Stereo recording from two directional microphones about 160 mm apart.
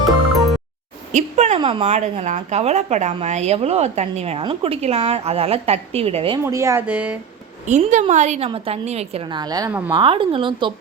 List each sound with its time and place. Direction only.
0.0 s music: centre (ahead or behind)
1.1 s a sound: 45° right (ahead or behind)
1.5 s speech: 30° right (ahead or behind)
6.4 s speech: 20° right (ahead or behind)
6.8 s speech: 5° right (ahead or behind)
7.7 s a woman's voice: 50° right (ahead or behind); by 10.7 s 30° right (ahead or behind)